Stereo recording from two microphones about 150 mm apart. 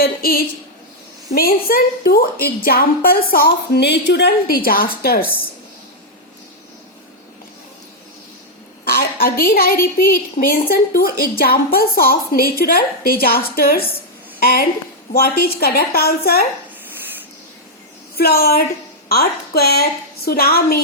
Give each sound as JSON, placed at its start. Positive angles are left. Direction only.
{"t": 0.0, "sound": "a woman's voice", "side_deg": 90}
{"t": 8.9, "sound": "a woman's voice", "side_deg": 80}
{"t": 18.2, "sound": "a woman's voice", "side_deg": 90}